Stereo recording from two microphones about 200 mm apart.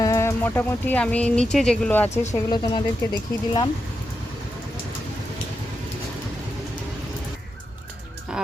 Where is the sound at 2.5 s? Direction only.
20° left (ahead or behind).